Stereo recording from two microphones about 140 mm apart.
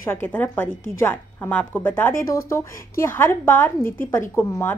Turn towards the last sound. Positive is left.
turn(degrees=20)  # may be behind; listen again after turning